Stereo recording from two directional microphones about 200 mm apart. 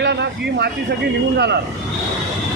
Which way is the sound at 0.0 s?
60° right (ahead or behind).